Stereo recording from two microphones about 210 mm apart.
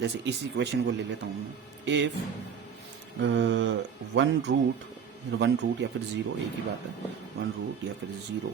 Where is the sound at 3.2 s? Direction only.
60° right (ahead or behind).